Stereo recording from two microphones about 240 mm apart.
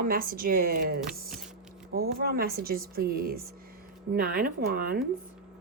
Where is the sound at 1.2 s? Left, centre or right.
Right.